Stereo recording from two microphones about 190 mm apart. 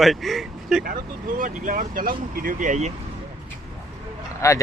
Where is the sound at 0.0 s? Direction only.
Centre (ahead or behind).